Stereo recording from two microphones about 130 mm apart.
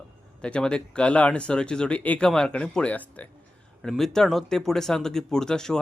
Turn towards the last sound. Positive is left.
turn(degrees=5)  # may be behind; listen again after turning